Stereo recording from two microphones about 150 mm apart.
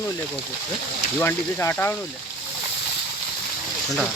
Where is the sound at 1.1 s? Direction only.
15° left (ahead or behind).